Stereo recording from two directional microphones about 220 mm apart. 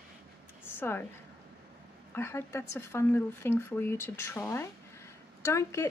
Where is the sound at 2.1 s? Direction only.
10° left (ahead or behind).